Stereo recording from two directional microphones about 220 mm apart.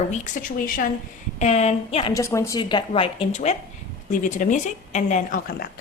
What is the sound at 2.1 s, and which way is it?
A woman's voice, 15° left (ahead or behind).